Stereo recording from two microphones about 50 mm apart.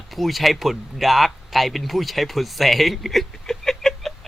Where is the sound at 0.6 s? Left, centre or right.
Centre.